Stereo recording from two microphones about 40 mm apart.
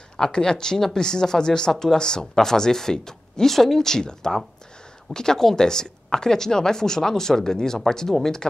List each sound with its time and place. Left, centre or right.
0.2 s speech: centre